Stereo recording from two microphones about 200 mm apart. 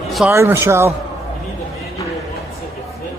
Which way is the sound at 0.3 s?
10° right (ahead or behind).